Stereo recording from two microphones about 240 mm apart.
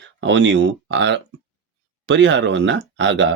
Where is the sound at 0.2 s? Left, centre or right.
Right.